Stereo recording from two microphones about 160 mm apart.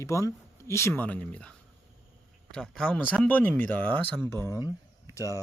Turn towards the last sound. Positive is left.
turn(degrees=20)  # may be behind; listen again after turning